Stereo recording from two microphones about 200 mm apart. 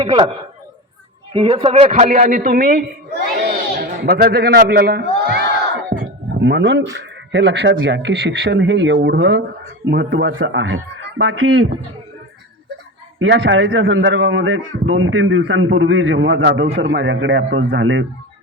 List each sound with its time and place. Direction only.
0.0 s a man's voice: 25° right (ahead or behind)
1.3 s a man's voice: 25° right (ahead or behind); by 5.4 s 55° right (ahead or behind)
6.0 s a sound: 60° right (ahead or behind)
6.9 s a man's voice: 60° right (ahead or behind)
13.1 s a man's voice: 60° right (ahead or behind)